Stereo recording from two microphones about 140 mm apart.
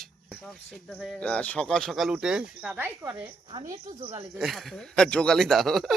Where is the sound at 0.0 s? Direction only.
Centre (ahead or behind).